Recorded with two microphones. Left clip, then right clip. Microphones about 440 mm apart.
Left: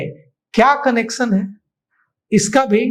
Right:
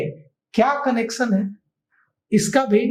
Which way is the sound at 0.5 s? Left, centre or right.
Left.